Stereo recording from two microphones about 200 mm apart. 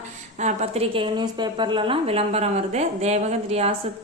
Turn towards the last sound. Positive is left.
turn(degrees=-30)  # may be behind; listen again after turning